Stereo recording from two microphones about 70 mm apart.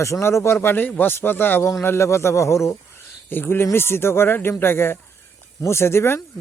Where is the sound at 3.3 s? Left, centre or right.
Left.